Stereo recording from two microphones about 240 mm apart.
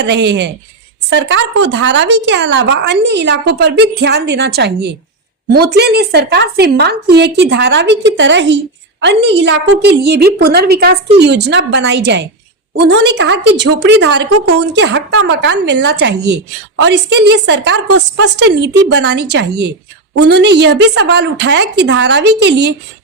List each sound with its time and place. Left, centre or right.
0.0 s speech: right
14.3 s a woman's voice: right
14.6 s speech: right